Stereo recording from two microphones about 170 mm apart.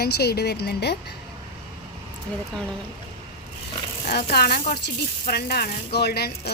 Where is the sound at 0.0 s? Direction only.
70° left (ahead or behind).